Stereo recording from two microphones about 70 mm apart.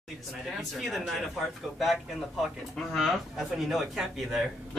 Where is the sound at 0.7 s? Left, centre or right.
Centre.